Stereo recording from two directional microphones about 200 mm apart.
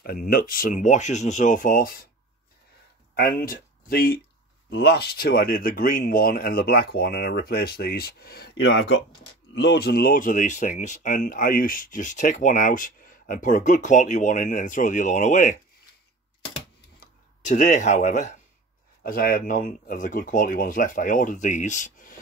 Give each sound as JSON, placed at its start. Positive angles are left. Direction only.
{"t": 0.0, "sound": "speech", "side_deg": 45}
{"t": 3.2, "sound": "speech", "side_deg": 50}
{"t": 17.4, "sound": "speech", "side_deg": 40}